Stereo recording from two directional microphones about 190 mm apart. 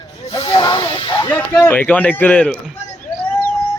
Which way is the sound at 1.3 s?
10° left (ahead or behind).